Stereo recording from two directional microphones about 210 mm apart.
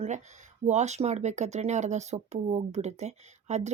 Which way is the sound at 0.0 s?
35° right (ahead or behind).